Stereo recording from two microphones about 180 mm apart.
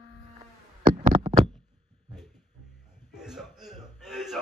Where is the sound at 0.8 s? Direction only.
50° right (ahead or behind).